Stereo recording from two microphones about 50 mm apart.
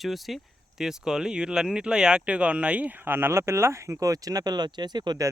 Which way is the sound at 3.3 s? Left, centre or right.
Right.